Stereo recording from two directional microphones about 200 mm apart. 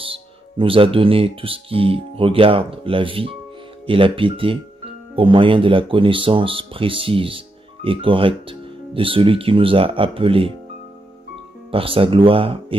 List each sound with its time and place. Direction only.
0.0 s speech: 25° right (ahead or behind)
11.7 s speech: 25° right (ahead or behind)